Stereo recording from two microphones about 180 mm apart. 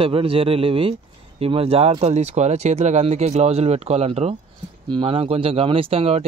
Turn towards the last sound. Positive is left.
turn(degrees=-35)  # may be behind; listen again after turning